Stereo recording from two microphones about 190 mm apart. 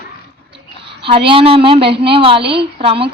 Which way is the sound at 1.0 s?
25° right (ahead or behind).